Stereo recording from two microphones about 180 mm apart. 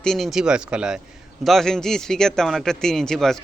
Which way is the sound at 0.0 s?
Centre (ahead or behind).